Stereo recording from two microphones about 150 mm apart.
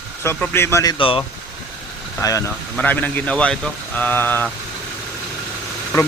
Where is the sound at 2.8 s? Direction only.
10° left (ahead or behind).